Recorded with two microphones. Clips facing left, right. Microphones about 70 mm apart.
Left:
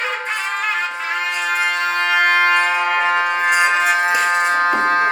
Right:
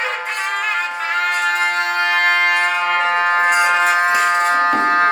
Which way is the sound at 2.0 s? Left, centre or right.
Centre.